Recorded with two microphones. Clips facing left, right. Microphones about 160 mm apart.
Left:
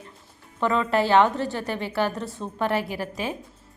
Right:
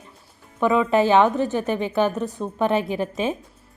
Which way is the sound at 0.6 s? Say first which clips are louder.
Right 4 dB; 15° right (ahead or behind).